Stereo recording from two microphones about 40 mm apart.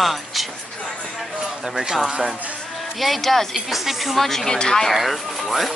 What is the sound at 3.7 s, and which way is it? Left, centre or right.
A woman's voice, centre.